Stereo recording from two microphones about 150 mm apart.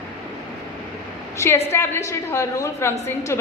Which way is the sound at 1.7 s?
15° left (ahead or behind).